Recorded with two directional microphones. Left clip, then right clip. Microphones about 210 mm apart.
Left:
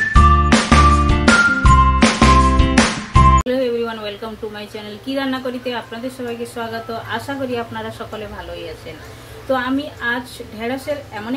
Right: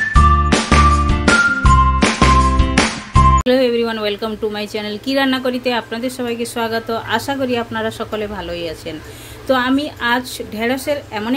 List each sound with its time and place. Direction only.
0.1 s music: centre (ahead or behind)
3.4 s a woman's voice: 55° right (ahead or behind)
9.5 s a woman's voice: 55° right (ahead or behind)